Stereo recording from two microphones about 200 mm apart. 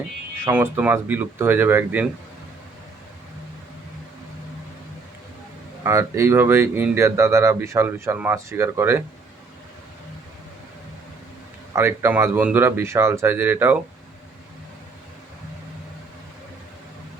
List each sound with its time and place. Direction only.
0.4 s speech: 10° right (ahead or behind)
5.8 s speech: 15° right (ahead or behind)
11.7 s speech: 10° right (ahead or behind)